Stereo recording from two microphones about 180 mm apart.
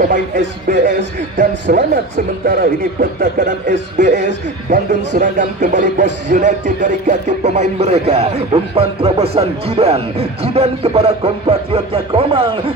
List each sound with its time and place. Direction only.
0.7 s speech: 45° right (ahead or behind)
1.4 s speech: 60° right (ahead or behind); by 12.5 s 30° right (ahead or behind)